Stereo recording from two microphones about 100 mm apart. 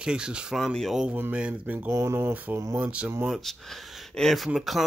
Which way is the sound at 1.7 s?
25° right (ahead or behind).